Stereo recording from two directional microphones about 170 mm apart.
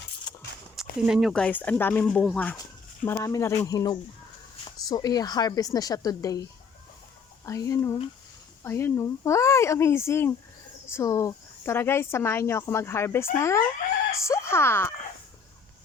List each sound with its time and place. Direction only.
0.9 s speech: 5° right (ahead or behind); by 14.9 s 15° left (ahead or behind)